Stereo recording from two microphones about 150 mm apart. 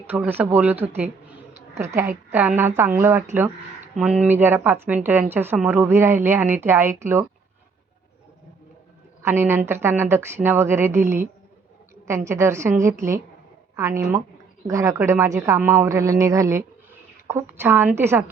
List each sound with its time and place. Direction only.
0.1 s a woman's voice: 10° right (ahead or behind)
1.8 s a woman's voice: 15° right (ahead or behind)
9.2 s a woman's voice: 15° right (ahead or behind)